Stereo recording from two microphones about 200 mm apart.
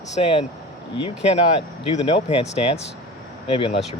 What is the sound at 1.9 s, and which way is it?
Speech, 30° left (ahead or behind).